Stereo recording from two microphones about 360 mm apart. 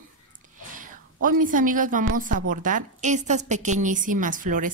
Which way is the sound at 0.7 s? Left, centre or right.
Right.